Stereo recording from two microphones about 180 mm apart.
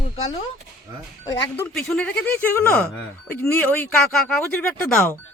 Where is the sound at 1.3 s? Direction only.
10° left (ahead or behind).